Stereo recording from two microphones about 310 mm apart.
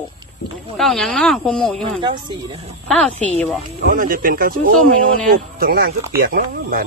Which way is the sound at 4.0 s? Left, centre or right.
Right.